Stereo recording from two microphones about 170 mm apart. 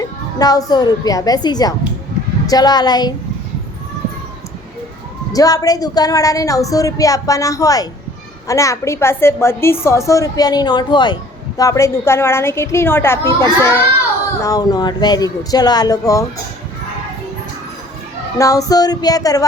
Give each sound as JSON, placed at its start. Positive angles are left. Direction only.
{"t": 0.3, "sound": "a woman's voice", "side_deg": 20}
{"t": 5.3, "sound": "a woman's voice", "side_deg": 20}
{"t": 18.3, "sound": "a woman's voice", "side_deg": 20}